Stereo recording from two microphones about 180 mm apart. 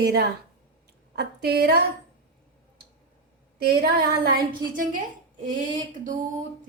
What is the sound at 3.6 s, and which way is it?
Speech, 60° right (ahead or behind).